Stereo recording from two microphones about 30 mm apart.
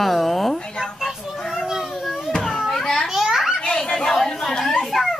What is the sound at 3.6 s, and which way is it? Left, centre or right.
Chatter, left.